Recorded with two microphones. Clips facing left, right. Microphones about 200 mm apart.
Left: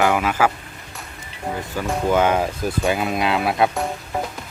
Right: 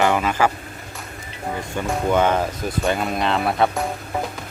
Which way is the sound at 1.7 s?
Centre (ahead or behind).